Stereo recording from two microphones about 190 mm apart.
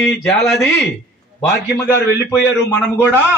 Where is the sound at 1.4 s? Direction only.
15° left (ahead or behind).